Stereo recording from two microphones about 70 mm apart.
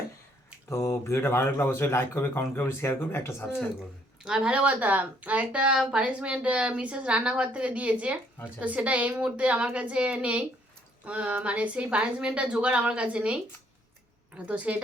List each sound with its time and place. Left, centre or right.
0.7 s speech: left
4.2 s a woman's voice: centre